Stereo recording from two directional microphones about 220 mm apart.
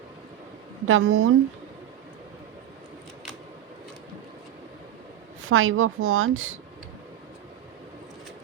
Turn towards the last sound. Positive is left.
turn(degrees=-65)  # may be behind; listen again after turning